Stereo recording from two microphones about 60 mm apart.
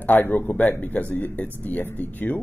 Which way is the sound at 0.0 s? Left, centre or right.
Left.